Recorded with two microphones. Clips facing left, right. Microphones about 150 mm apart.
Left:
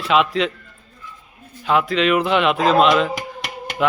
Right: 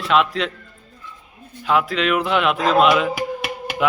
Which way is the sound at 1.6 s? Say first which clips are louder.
Left 2 dB; centre (ahead or behind).